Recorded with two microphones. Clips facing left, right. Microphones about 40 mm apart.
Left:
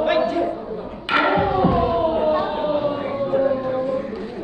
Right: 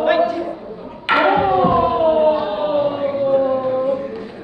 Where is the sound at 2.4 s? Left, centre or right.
Right.